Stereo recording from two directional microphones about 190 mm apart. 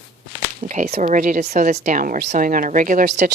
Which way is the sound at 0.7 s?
35° right (ahead or behind).